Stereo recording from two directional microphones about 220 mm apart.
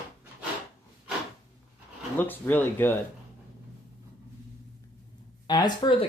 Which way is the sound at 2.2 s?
10° left (ahead or behind).